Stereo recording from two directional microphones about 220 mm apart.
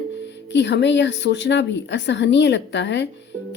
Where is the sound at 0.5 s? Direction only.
55° left (ahead or behind).